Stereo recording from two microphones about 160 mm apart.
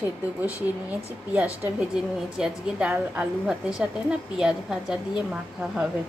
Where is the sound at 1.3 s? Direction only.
10° right (ahead or behind).